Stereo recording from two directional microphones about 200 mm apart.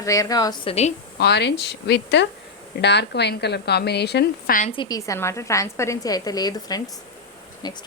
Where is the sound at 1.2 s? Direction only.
55° left (ahead or behind).